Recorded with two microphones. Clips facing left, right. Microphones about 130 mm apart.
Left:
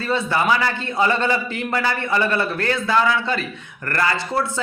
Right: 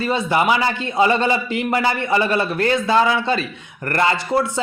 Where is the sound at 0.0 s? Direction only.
20° right (ahead or behind).